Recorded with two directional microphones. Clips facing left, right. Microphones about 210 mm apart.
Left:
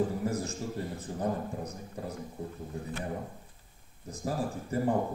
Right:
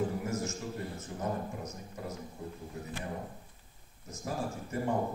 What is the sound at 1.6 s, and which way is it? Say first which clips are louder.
Speech: left 3 dB; 35° left (ahead or behind).